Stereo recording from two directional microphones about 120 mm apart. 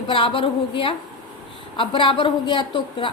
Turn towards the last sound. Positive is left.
turn(degrees=45)  # may be behind; listen again after turning